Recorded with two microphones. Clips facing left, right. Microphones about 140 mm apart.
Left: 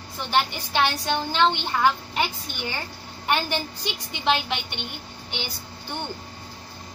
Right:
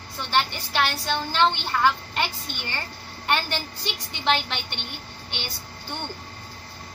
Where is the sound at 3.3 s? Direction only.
15° left (ahead or behind).